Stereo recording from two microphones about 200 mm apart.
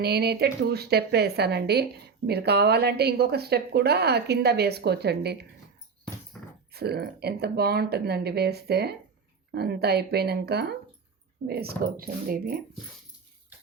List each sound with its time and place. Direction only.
0.0 s speech: 55° right (ahead or behind)
6.3 s a sound: 5° left (ahead or behind)
6.7 s speech: 55° right (ahead or behind)